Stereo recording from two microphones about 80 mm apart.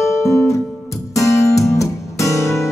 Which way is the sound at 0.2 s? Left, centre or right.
Left.